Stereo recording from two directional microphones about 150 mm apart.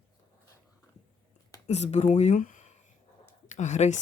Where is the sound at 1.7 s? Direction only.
45° left (ahead or behind).